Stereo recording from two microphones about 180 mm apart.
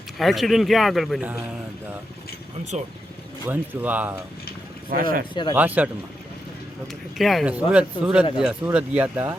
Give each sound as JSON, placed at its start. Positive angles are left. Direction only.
{"t": 0.2, "sound": "speech", "side_deg": 0}
{"t": 2.7, "sound": "speech", "side_deg": -40}
{"t": 3.4, "sound": "speech", "side_deg": -10}
{"t": 4.9, "sound": "speech", "side_deg": -55}
{"t": 5.3, "sound": "speech", "side_deg": 25}
{"t": 5.5, "sound": "speech", "side_deg": -10}
{"t": 7.2, "sound": "speech", "side_deg": 0}